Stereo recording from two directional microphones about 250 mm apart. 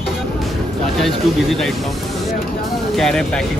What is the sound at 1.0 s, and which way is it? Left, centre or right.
Speech, centre.